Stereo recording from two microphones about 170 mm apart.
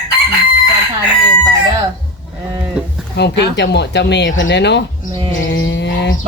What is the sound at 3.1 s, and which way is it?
Speech, 85° left.